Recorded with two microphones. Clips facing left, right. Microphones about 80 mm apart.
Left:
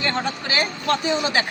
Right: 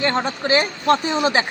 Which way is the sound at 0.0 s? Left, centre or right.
Right.